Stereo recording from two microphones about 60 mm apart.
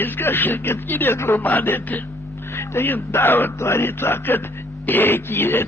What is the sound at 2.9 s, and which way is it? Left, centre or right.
Speech, left.